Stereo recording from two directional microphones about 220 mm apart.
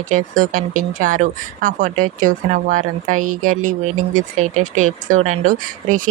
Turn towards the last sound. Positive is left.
turn(degrees=-35)  # may be behind; listen again after turning